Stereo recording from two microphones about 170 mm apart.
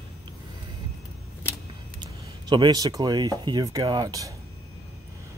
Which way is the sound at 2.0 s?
25° right (ahead or behind).